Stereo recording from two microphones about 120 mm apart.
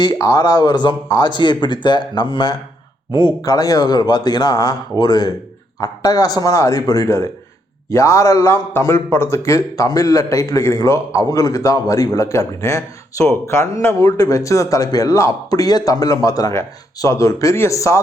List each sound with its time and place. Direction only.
0.0 s a man's voice: 30° left (ahead or behind)